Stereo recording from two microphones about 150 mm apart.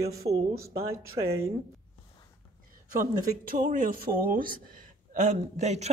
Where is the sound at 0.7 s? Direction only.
15° right (ahead or behind).